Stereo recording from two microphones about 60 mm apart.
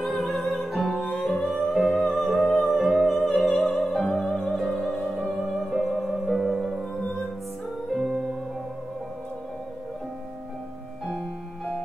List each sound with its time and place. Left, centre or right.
0.0 s music: centre
3.3 s opera: centre
5.5 s music: centre
7.0 s music: centre
8.0 s music: centre
11.1 s music: centre